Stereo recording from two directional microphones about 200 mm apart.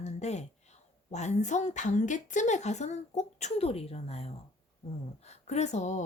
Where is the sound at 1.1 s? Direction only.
35° left (ahead or behind).